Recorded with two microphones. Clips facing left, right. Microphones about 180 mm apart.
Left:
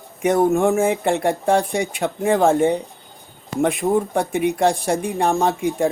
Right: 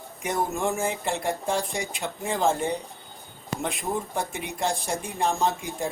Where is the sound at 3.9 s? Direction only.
60° left (ahead or behind).